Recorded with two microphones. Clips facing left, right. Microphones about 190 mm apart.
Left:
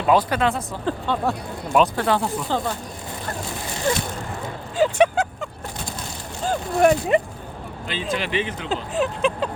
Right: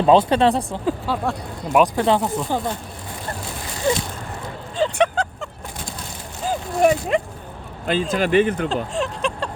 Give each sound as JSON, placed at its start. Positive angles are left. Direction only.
{"t": 0.0, "sound": "speech", "side_deg": -25}
{"t": 0.9, "sound": "speech", "side_deg": -5}
{"t": 1.7, "sound": "speech", "side_deg": -15}
{"t": 4.8, "sound": "vehicle", "side_deg": 5}
{"t": 6.4, "sound": "speech", "side_deg": -5}
{"t": 7.9, "sound": "speech", "side_deg": -45}
{"t": 8.7, "sound": "speech", "side_deg": 5}